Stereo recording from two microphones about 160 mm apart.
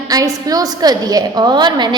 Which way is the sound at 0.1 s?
20° right (ahead or behind).